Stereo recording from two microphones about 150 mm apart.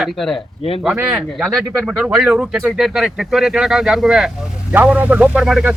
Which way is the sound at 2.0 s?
5° right (ahead or behind).